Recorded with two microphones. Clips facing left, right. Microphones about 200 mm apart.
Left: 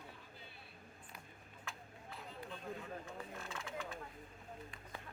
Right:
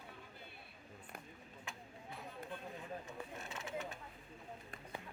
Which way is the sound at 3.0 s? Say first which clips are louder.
Even; 20° right (ahead or behind).